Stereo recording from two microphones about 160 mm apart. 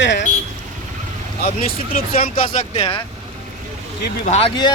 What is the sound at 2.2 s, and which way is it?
Speech, 35° left (ahead or behind).